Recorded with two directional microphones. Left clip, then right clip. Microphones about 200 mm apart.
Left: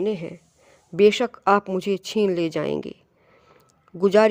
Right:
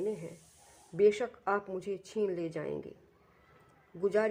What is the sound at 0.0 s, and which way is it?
Speech, 50° left (ahead or behind).